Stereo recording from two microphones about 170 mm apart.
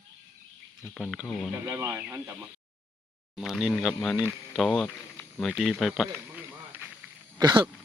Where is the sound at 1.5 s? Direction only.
15° right (ahead or behind).